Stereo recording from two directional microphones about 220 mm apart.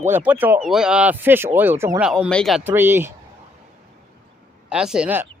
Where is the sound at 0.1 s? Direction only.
10° right (ahead or behind).